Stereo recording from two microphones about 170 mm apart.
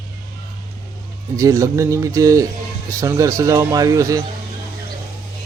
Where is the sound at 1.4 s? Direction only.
20° right (ahead or behind).